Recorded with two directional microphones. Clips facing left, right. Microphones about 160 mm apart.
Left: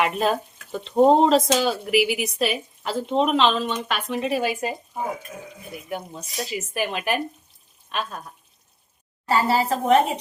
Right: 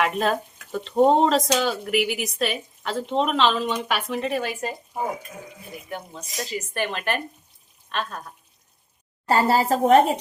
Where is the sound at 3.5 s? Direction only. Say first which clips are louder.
Right 1 dB; 10° right (ahead or behind).